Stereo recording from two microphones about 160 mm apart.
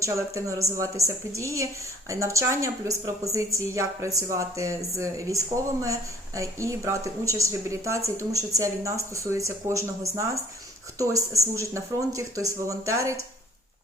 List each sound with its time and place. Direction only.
0.0 s speech: 20° right (ahead or behind)